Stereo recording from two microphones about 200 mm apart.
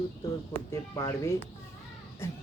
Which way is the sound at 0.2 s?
15° left (ahead or behind).